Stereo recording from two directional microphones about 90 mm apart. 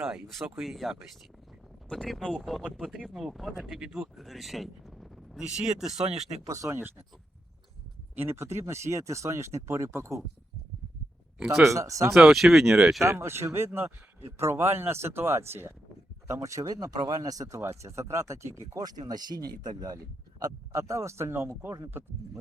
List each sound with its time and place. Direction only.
0.5 s speech: 5° right (ahead or behind)
2.8 s speech: 10° right (ahead or behind)
4.2 s a sound: centre (ahead or behind)
5.4 s speech: 5° right (ahead or behind)
6.4 s speech: 35° right (ahead or behind)
8.1 s speech: 25° right (ahead or behind)
11.3 s speech: 10° right (ahead or behind)
11.7 s speech: 35° right (ahead or behind)
12.1 s speech: 5° right (ahead or behind)
13.0 s speech: 30° right (ahead or behind)
18.7 s speech: 45° right (ahead or behind)
20.4 s speech: 35° right (ahead or behind)